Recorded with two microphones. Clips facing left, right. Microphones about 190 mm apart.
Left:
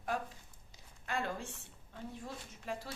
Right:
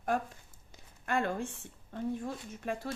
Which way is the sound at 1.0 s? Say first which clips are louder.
Right 6 dB; 55° right (ahead or behind).